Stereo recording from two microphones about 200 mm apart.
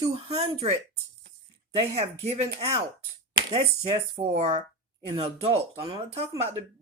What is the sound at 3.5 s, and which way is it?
Speech, 30° right (ahead or behind).